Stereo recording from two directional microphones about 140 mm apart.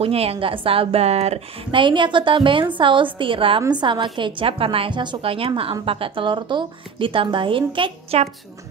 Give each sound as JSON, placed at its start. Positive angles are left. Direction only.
{"t": 0.0, "sound": "a woman's voice", "side_deg": -45}